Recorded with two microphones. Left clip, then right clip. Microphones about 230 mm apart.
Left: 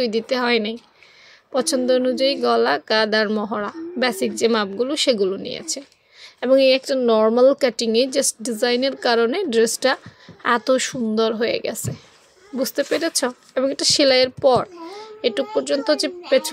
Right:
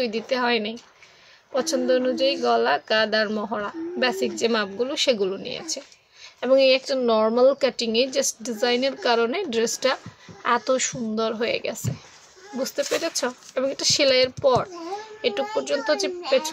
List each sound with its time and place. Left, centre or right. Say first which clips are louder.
0.0 s a child's voice: left 3 dB; left